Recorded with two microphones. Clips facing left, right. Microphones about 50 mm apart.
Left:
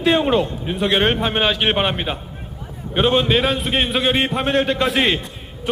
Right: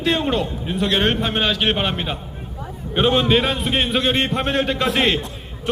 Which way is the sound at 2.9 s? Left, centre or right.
Centre.